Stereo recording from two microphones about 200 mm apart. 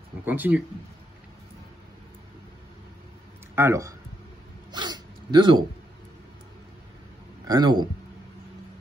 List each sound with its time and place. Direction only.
0.2 s speech: 10° right (ahead or behind)
3.5 s speech: 15° right (ahead or behind)
4.7 s dog: 20° right (ahead or behind)
7.4 s speech: 20° right (ahead or behind)